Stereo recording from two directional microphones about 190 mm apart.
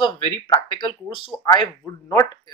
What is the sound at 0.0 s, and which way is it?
Speech, 25° left (ahead or behind).